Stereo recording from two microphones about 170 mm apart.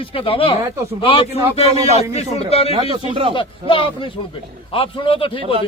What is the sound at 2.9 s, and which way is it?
Speech, 35° right (ahead or behind).